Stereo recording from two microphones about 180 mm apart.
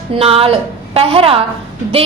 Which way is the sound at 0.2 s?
30° right (ahead or behind).